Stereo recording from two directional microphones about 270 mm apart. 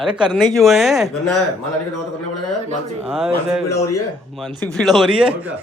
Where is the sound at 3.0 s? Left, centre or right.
Centre.